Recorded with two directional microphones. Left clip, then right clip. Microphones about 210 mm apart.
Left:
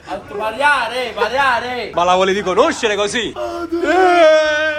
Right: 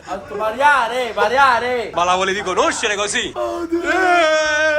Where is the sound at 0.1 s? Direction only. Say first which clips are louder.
Even; 15° right (ahead or behind).